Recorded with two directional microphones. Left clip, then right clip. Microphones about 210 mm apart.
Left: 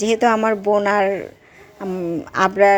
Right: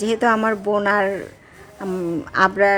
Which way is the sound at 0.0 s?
15° left (ahead or behind).